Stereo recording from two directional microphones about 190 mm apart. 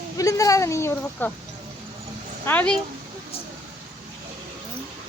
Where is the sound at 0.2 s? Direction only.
15° left (ahead or behind).